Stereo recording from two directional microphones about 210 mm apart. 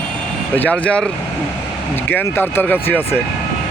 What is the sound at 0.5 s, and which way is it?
Speech, 5° left (ahead or behind).